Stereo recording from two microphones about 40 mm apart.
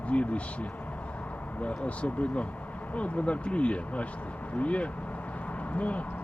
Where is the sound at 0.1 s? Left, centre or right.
Left.